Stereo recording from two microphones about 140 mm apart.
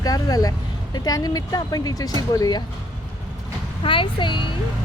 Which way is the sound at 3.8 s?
40° left (ahead or behind).